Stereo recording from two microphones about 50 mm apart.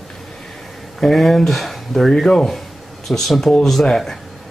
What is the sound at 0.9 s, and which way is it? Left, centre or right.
Speech, centre.